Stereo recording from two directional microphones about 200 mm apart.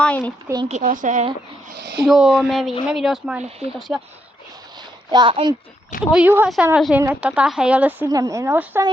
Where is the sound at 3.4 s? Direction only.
30° right (ahead or behind).